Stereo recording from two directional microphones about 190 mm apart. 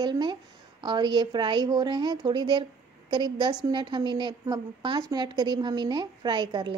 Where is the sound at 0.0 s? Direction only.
25° right (ahead or behind).